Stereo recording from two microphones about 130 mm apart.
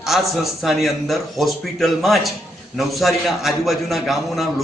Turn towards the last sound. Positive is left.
turn(degrees=0)  # may be behind; listen again after turning